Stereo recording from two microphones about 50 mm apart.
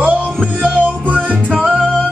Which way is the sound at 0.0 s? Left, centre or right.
Right.